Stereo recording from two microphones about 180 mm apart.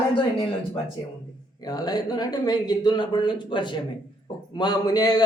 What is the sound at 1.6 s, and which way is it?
Speech, 20° left (ahead or behind).